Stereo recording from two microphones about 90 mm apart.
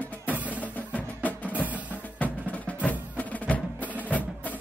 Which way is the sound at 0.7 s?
20° left (ahead or behind).